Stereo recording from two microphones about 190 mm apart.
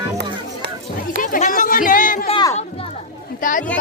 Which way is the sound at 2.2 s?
25° left (ahead or behind).